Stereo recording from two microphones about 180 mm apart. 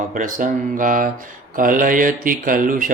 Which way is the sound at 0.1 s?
50° right (ahead or behind).